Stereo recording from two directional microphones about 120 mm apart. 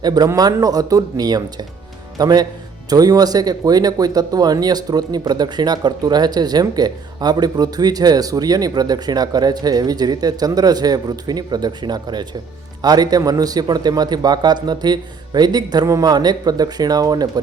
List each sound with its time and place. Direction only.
0.0 s speech: 30° right (ahead or behind)